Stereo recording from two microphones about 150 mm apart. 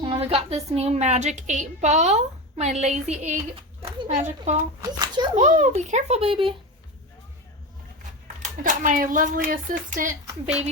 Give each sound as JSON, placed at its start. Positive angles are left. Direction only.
{"t": 0.0, "sound": "a woman's voice", "side_deg": -35}
{"t": 4.8, "sound": "a child's voice", "side_deg": -25}
{"t": 5.4, "sound": "a woman's voice", "side_deg": -50}
{"t": 8.4, "sound": "speech", "side_deg": -60}